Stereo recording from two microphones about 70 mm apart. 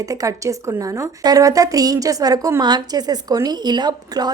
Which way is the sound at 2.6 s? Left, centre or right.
Right.